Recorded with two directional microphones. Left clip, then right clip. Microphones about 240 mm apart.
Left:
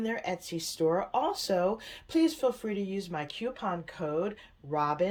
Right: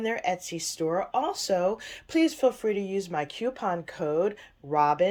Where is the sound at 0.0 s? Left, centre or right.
Centre.